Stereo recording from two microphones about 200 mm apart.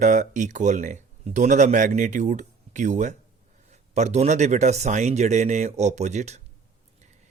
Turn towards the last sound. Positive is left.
turn(degrees=-35)  # may be behind; listen again after turning